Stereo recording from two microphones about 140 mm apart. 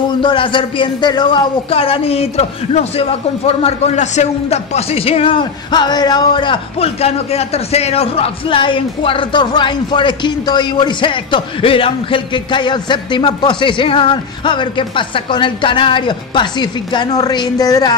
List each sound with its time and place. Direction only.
0.2 s a man's voice: 35° left (ahead or behind)